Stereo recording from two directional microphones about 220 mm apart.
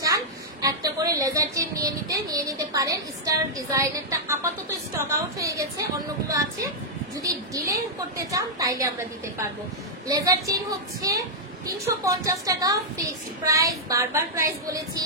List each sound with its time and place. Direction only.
0.0 s a woman's voice: 15° right (ahead or behind)
10.0 s a woman's voice: 15° right (ahead or behind)
11.6 s a woman's voice: 15° right (ahead or behind)